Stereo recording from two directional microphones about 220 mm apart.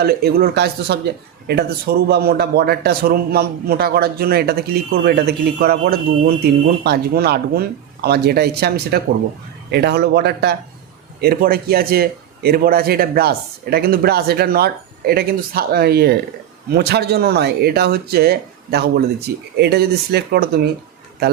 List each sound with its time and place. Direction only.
0.0 s speech: 45° right (ahead or behind)